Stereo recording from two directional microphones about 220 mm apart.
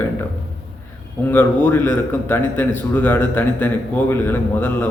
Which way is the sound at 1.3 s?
10° left (ahead or behind).